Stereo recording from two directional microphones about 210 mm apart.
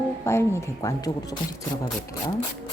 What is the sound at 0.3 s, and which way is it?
Speech, 15° left (ahead or behind).